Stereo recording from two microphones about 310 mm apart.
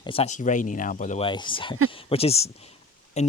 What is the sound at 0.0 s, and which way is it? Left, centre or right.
Speech, centre.